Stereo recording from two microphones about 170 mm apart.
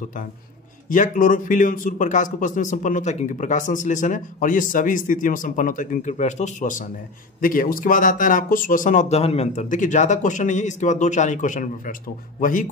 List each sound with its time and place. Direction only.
0.8 s a man's voice: 50° left (ahead or behind)